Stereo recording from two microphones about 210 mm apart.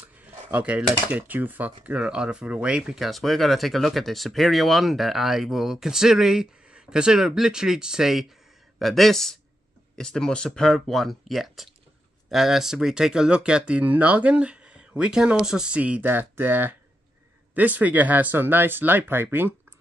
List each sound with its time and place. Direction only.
0.5 s speech: 5° right (ahead or behind)